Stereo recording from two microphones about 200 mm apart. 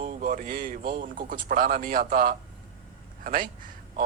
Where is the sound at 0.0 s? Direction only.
40° right (ahead or behind).